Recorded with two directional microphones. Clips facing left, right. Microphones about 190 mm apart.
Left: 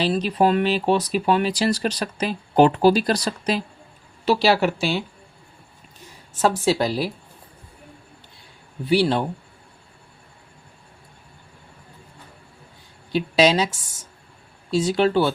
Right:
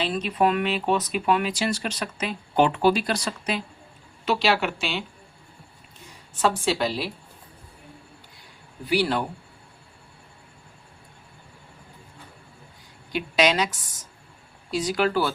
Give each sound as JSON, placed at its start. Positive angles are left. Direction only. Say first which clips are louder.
{"t": 0.0, "sound": "speech", "louder": "left 4 dB", "side_deg": 35}
{"t": 6.4, "sound": "speech", "louder": "left 3 dB", "side_deg": 40}
{"t": 8.8, "sound": "a woman's voice", "louder": "left 4 dB", "side_deg": 30}
{"t": 13.1, "sound": "a woman's voice", "louder": "left 4 dB", "side_deg": 30}